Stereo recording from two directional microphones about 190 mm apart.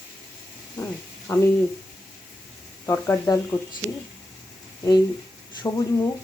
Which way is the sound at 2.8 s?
15° left (ahead or behind).